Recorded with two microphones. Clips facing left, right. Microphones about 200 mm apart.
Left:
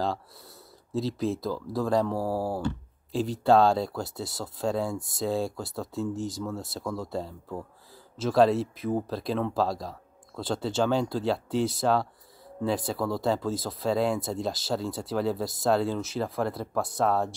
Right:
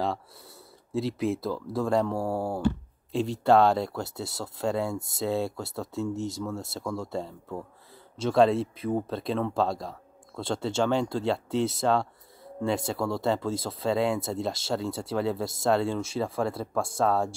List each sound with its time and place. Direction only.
0.9 s speech: centre (ahead or behind)
6.1 s speech: 25° right (ahead or behind)
6.4 s speech: 5° left (ahead or behind)